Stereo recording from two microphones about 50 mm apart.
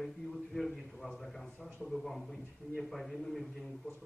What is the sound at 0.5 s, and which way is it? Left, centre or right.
Speech, centre.